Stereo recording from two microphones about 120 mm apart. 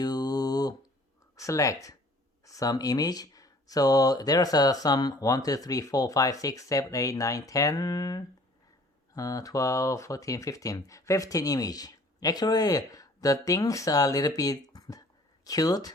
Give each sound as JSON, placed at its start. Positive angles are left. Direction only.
{"t": 0.0, "sound": "mantra", "side_deg": 35}
{"t": 1.4, "sound": "speech", "side_deg": 25}